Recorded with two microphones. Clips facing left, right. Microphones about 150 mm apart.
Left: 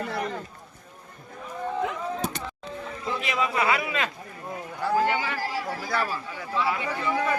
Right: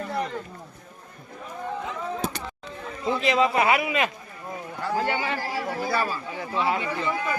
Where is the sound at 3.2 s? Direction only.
30° right (ahead or behind).